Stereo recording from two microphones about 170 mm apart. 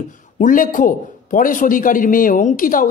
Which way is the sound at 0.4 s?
50° left (ahead or behind).